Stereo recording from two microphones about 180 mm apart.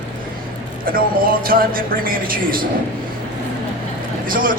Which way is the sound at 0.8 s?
50° right (ahead or behind).